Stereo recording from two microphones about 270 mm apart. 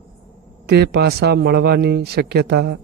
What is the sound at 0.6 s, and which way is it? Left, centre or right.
Speech, right.